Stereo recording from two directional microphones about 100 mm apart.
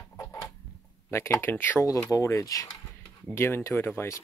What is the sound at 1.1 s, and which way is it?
Speech, 25° left (ahead or behind).